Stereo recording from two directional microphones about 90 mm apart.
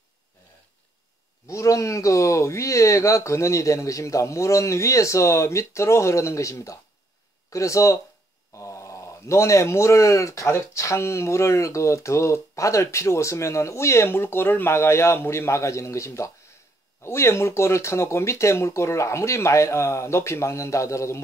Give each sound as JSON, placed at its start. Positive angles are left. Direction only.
{"t": 1.5, "sound": "speech", "side_deg": 35}